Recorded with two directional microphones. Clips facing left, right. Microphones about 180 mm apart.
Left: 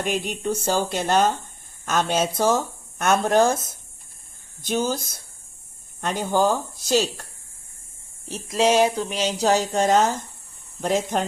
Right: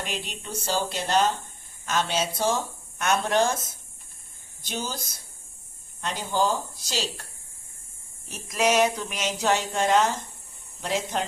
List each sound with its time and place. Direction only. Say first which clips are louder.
0.0 s speech: left 9 dB; 50° left (ahead or behind)
8.3 s speech: left 4 dB; 30° left (ahead or behind); by 11.3 s 45° left (ahead or behind)